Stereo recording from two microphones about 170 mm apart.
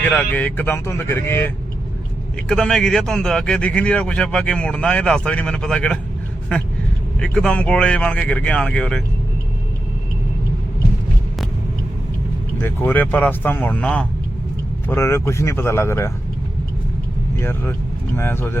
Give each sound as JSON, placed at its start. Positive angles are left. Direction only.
{"t": 0.0, "sound": "speech", "side_deg": 10}
{"t": 7.2, "sound": "speech", "side_deg": 5}
{"t": 12.5, "sound": "speech", "side_deg": 10}
{"t": 17.4, "sound": "speech", "side_deg": 10}